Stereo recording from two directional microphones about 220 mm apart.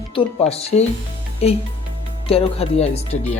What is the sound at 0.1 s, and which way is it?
Speech, 30° left (ahead or behind).